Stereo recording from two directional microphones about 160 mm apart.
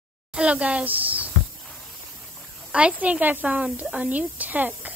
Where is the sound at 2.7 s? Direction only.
5° right (ahead or behind).